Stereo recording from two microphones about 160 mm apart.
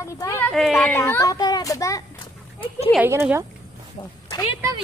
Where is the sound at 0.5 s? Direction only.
Centre (ahead or behind); by 2.0 s 20° left (ahead or behind).